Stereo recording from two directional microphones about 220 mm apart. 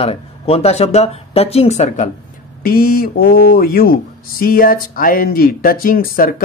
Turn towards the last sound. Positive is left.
turn(degrees=40)  # may be behind; listen again after turning